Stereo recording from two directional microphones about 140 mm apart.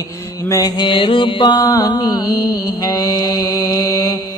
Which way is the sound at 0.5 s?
25° left (ahead or behind).